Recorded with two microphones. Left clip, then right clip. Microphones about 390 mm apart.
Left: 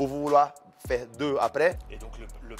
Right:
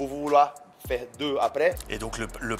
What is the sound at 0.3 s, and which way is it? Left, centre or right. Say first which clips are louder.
A man's voice: right 2 dB; left.